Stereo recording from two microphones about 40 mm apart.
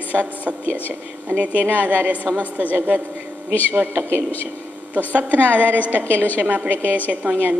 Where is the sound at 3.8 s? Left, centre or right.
Right.